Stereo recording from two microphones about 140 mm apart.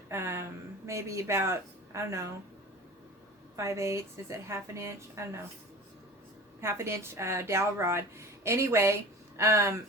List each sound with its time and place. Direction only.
0.1 s a sound: 20° right (ahead or behind)
0.9 s a woman's voice: 20° right (ahead or behind)
3.5 s a woman's voice: 20° right (ahead or behind)
6.6 s a woman's voice: 20° right (ahead or behind)